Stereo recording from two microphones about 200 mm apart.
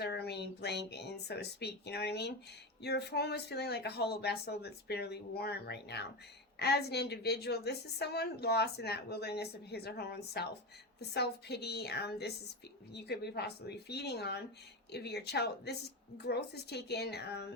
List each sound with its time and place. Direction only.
0.0 s a woman's voice: 55° left (ahead or behind)